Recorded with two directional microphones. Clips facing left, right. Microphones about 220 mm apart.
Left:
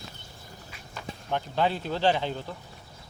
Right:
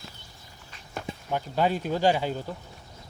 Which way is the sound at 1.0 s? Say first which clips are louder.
Even; 10° right (ahead or behind).